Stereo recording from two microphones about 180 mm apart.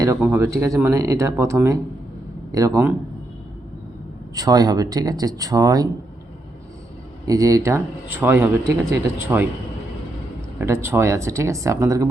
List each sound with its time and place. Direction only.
0.2 s speech: 15° right (ahead or behind)
4.4 s speech: 20° right (ahead or behind)
7.3 s speech: 20° right (ahead or behind)
10.6 s speech: 15° right (ahead or behind)